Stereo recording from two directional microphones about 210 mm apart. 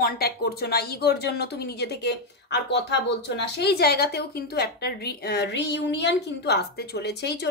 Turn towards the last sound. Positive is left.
turn(degrees=50)  # may be behind; listen again after turning